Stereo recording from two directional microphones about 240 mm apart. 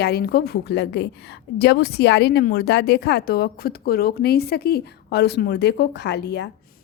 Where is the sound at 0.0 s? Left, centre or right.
Left.